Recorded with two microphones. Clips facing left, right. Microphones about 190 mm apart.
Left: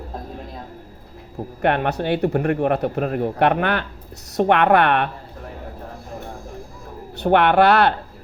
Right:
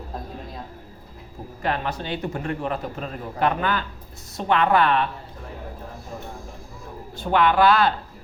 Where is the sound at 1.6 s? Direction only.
65° left (ahead or behind).